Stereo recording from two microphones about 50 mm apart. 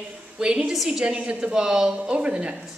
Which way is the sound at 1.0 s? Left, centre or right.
Centre.